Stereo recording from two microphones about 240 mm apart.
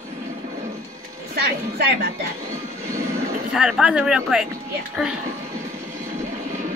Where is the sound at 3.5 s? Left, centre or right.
Centre.